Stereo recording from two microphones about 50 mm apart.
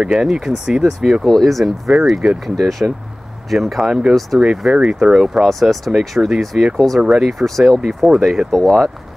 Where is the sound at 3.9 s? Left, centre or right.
Centre.